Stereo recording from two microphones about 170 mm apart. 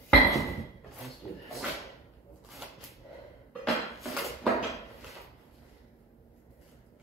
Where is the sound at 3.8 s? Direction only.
Centre (ahead or behind).